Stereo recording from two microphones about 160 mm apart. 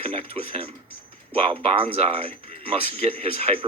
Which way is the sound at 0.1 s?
40° right (ahead or behind).